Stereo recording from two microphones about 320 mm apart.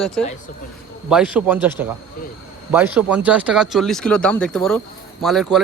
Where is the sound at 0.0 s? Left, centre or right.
Centre.